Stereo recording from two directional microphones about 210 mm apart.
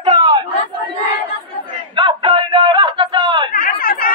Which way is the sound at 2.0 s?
25° right (ahead or behind).